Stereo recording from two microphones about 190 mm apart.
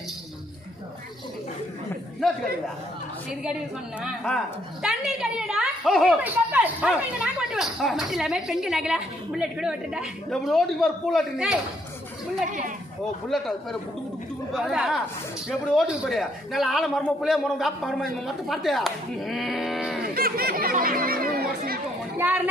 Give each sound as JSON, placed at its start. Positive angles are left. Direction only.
{"t": 3.2, "sound": "a woman's voice", "side_deg": -5}
{"t": 12.5, "sound": "speech", "side_deg": -45}
{"t": 13.3, "sound": "a woman's voice", "side_deg": 0}
{"t": 20.1, "sound": "speech", "side_deg": -50}